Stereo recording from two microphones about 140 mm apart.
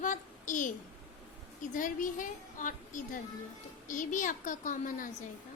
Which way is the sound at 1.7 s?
65° left (ahead or behind).